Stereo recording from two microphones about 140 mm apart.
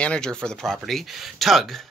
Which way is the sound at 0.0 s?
5° left (ahead or behind).